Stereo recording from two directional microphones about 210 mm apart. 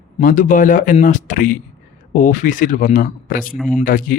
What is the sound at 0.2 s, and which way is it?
Speech, 40° left (ahead or behind).